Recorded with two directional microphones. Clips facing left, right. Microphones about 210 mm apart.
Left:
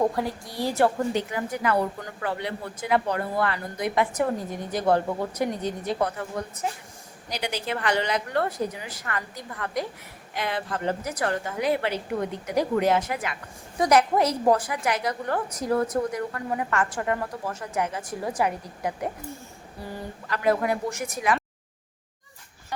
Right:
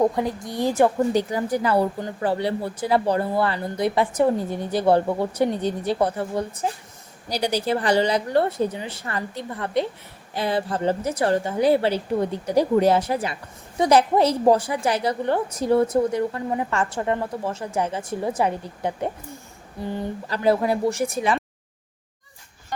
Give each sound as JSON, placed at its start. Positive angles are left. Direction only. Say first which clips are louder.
{"t": 0.0, "sound": "a woman's voice", "louder": "right 4 dB", "side_deg": -20}
{"t": 1.1, "sound": "a woman's voice", "louder": "right 6 dB", "side_deg": -35}